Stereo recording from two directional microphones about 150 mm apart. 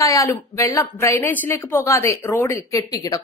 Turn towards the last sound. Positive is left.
turn(degrees=25)  # may be behind; listen again after turning